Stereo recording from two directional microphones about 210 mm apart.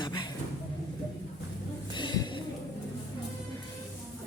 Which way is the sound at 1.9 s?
20° left (ahead or behind).